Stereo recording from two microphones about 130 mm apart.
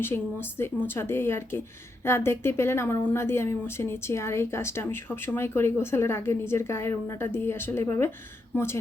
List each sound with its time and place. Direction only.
0.0 s a woman's voice: 15° left (ahead or behind)